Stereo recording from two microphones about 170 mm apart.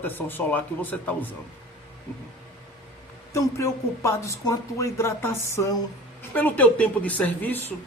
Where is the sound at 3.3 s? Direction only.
15° left (ahead or behind).